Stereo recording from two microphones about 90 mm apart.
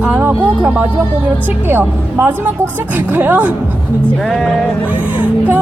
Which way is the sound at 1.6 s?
20° right (ahead or behind).